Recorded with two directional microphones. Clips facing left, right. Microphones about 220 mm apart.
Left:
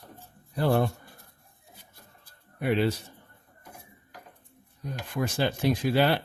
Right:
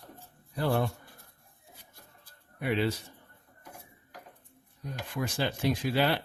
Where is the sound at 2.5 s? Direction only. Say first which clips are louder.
Left 4 dB; 45° left (ahead or behind).